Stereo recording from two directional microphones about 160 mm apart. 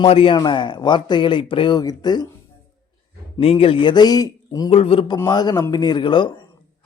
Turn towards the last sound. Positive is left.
turn(degrees=30)  # may be behind; listen again after turning